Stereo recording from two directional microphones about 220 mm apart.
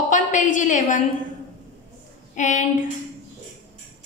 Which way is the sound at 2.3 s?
35° left (ahead or behind).